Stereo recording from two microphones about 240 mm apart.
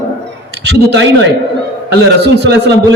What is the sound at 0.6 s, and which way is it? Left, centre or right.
Speech, right.